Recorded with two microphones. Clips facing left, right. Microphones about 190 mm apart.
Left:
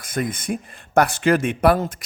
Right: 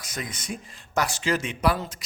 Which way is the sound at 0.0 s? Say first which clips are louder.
Left 10 dB; 55° left (ahead or behind).